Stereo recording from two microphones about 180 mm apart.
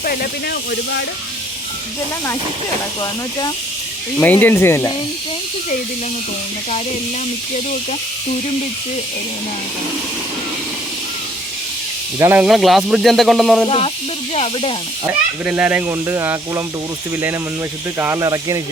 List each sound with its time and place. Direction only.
0.0 s speech: 55° left (ahead or behind); by 1.0 s 70° left (ahead or behind)
4.2 s speech: 10° left (ahead or behind)
12.2 s speech: 10° right (ahead or behind)
13.7 s speech: 35° left (ahead or behind)
15.0 s speech: 5° right (ahead or behind)
17.9 s speech: 15° right (ahead or behind)